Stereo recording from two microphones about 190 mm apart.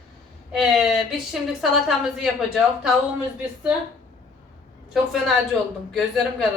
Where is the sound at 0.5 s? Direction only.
5° right (ahead or behind).